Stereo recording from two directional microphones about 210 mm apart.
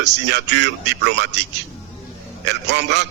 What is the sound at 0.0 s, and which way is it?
Speech, 55° right (ahead or behind).